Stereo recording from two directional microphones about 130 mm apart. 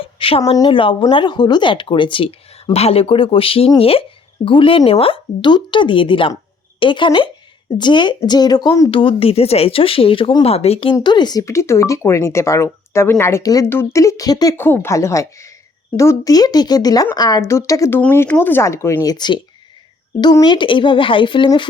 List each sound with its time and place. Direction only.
0.0 s a sound: 45° left (ahead or behind)
0.5 s a woman's voice: 35° left (ahead or behind)
8.9 s speech: 45° left (ahead or behind)
10.9 s speech: 35° left (ahead or behind)
14.5 s speech: 15° left (ahead or behind)
19.1 s a woman's voice: 35° left (ahead or behind)